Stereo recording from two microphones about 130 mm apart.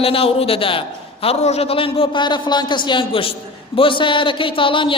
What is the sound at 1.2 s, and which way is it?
A man's voice, 55° left (ahead or behind).